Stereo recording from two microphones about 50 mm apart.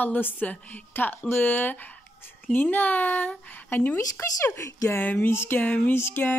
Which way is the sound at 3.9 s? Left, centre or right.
Left.